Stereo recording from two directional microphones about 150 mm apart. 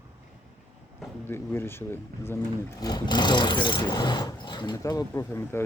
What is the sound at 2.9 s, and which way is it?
Speech, 30° left (ahead or behind).